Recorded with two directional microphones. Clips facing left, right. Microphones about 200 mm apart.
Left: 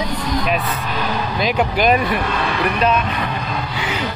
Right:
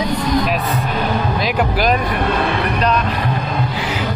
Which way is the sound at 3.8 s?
Centre (ahead or behind).